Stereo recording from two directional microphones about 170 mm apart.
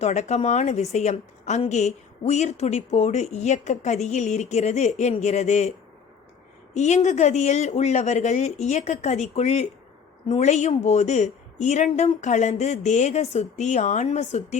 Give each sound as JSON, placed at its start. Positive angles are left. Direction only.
{"t": 0.0, "sound": "a woman's voice", "side_deg": 40}
{"t": 6.7, "sound": "a woman's voice", "side_deg": 40}